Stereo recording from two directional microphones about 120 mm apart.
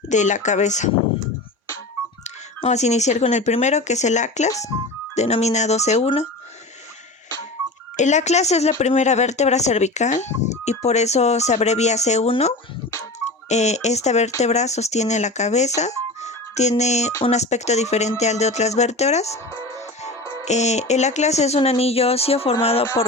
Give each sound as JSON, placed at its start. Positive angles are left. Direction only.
{"t": 0.1, "sound": "speech", "side_deg": 90}
{"t": 2.2, "sound": "speech", "side_deg": 75}
{"t": 5.1, "sound": "speech", "side_deg": 70}
{"t": 7.9, "sound": "speech", "side_deg": 80}
{"t": 13.5, "sound": "speech", "side_deg": 70}
{"t": 20.4, "sound": "speech", "side_deg": 70}